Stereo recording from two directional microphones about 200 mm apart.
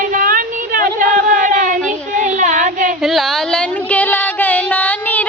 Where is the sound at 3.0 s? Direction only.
Centre (ahead or behind).